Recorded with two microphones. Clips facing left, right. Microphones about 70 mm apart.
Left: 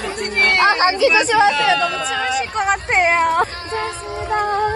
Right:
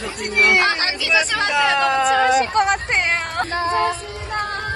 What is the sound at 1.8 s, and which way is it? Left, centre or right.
Speech, right.